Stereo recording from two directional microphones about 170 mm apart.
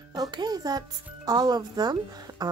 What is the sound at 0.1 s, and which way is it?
A child's voice, 25° right (ahead or behind).